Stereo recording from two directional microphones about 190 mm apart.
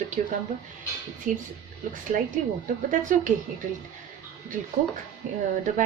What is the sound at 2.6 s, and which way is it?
Speech, 45° right (ahead or behind).